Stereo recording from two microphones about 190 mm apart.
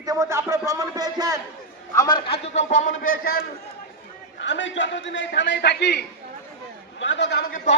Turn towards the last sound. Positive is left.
turn(degrees=50)  # may be behind; listen again after turning